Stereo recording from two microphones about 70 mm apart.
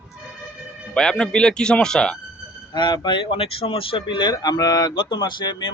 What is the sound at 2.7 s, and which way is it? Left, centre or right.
Speech, left.